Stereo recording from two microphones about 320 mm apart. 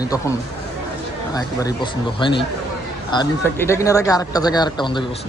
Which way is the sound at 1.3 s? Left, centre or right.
Centre.